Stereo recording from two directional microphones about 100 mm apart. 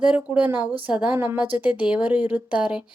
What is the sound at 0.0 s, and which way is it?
A woman's voice, 15° right (ahead or behind).